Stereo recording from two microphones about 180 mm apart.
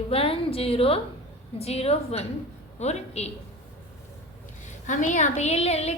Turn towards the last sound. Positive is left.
turn(degrees=35)  # may be behind; listen again after turning